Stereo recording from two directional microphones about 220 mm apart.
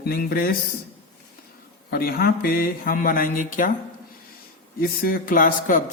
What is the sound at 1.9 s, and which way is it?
Speech, 45° left (ahead or behind).